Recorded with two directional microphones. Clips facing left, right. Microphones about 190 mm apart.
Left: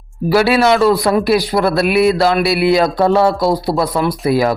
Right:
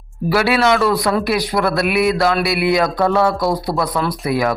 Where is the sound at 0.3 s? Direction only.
30° left (ahead or behind).